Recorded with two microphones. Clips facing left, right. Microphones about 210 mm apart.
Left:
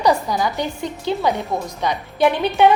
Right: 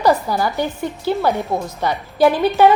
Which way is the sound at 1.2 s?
Centre (ahead or behind).